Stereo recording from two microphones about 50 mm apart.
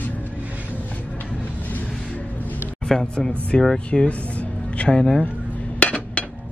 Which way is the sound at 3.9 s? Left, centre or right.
Left.